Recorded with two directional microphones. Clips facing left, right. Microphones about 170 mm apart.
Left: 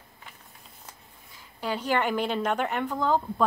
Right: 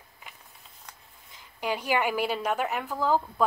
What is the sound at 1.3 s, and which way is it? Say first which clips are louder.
A woman's voice: even; 15° right (ahead or behind).